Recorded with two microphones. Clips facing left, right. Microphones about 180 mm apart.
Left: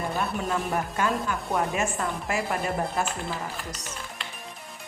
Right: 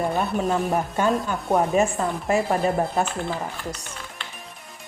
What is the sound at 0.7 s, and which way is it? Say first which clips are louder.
Speech: right 5 dB; 30° right (ahead or behind).